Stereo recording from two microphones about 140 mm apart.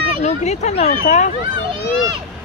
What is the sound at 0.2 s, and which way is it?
Speech, 55° left (ahead or behind).